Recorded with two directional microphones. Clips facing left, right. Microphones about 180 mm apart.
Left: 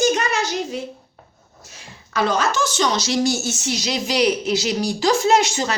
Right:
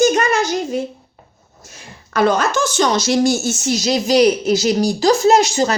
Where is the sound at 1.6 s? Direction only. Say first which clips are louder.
Right 3 dB; 50° right (ahead or behind).